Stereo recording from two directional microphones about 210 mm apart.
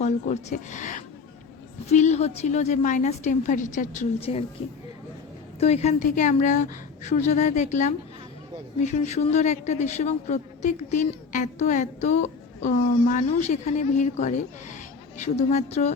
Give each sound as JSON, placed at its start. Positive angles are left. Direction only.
{"t": 0.0, "sound": "speech", "side_deg": 35}
{"t": 5.5, "sound": "speech", "side_deg": 30}